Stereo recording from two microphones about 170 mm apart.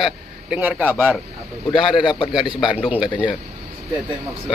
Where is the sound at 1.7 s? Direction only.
30° left (ahead or behind).